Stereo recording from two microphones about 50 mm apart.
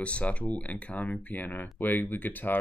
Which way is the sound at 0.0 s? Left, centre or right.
Left.